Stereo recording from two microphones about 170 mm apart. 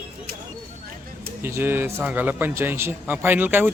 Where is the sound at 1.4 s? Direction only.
15° right (ahead or behind).